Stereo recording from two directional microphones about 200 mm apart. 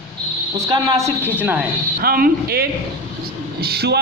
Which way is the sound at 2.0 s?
50° right (ahead or behind).